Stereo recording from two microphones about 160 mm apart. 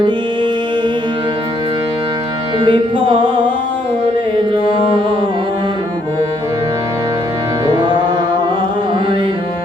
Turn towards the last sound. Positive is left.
turn(degrees=-25)  # may be behind; listen again after turning